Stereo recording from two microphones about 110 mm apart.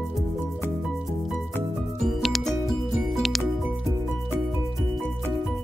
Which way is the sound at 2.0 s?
Centre (ahead or behind).